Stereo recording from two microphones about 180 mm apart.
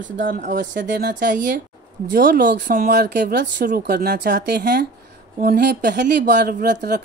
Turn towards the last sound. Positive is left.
turn(degrees=-65)  # may be behind; listen again after turning